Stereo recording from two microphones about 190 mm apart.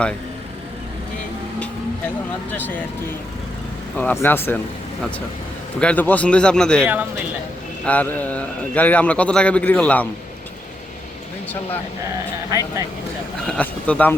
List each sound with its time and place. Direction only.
2.5 s a man's voice: 10° left (ahead or behind)
3.9 s a man's voice: 10° left (ahead or behind)
5.8 s speech: 10° left (ahead or behind)
7.9 s a man's voice: 10° left (ahead or behind)
12.5 s speech: 15° right (ahead or behind)
13.5 s a man's voice: 5° left (ahead or behind)